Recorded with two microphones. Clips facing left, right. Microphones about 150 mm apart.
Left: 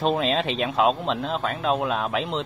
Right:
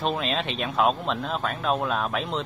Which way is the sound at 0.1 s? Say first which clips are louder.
Left 4 dB; 25° left (ahead or behind).